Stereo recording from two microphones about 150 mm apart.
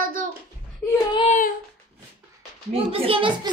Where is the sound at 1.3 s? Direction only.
60° left (ahead or behind).